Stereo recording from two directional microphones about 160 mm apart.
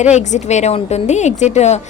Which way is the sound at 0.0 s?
45° left (ahead or behind).